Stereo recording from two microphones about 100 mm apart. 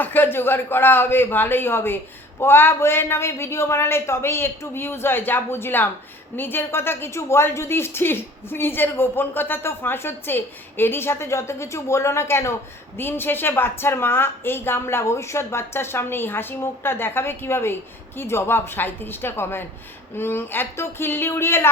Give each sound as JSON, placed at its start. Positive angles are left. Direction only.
{"t": 0.0, "sound": "a woman's voice", "side_deg": 20}